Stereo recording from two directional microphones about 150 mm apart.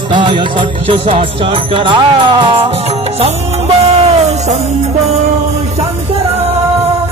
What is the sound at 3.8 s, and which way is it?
Music, 45° right (ahead or behind).